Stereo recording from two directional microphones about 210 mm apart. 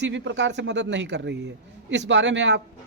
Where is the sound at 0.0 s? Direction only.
55° right (ahead or behind).